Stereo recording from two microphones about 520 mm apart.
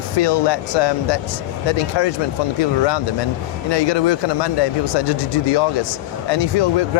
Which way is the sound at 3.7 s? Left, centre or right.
Left.